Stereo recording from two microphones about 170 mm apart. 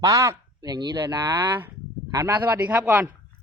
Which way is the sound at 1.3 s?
10° right (ahead or behind).